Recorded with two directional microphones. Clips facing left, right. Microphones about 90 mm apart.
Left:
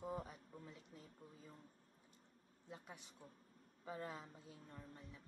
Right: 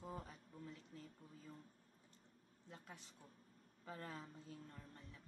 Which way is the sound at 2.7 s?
15° left (ahead or behind).